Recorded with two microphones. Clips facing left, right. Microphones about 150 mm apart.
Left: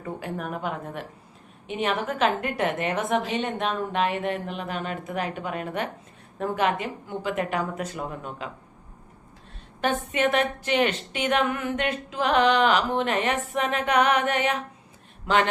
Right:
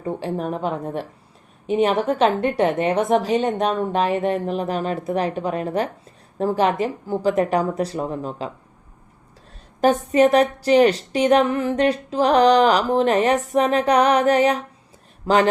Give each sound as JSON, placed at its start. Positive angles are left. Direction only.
{"t": 0.0, "sound": "a woman's voice", "side_deg": -30}
{"t": 9.8, "sound": "a woman's voice", "side_deg": -40}